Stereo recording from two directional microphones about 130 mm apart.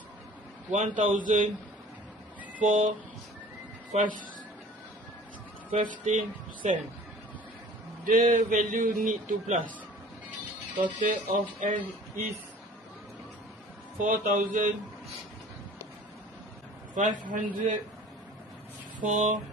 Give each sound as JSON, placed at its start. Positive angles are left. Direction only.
{"t": 0.7, "sound": "a man's voice", "side_deg": -90}
{"t": 2.6, "sound": "a man's voice", "side_deg": -90}
{"t": 3.9, "sound": "speech", "side_deg": -60}
{"t": 5.7, "sound": "speech", "side_deg": -80}
{"t": 8.0, "sound": "a man's voice", "side_deg": -90}
{"t": 10.8, "sound": "speech", "side_deg": -75}
{"t": 13.9, "sound": "a man's voice", "side_deg": -90}
{"t": 16.9, "sound": "a man's voice", "side_deg": -80}
{"t": 18.9, "sound": "a man's voice", "side_deg": -65}